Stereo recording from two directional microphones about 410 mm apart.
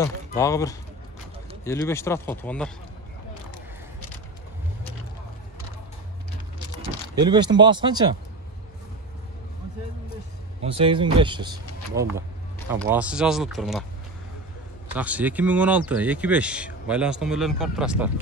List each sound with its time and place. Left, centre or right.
0.0 s speech: centre
7.2 s speech: centre
10.8 s speech: centre
15.0 s speech: centre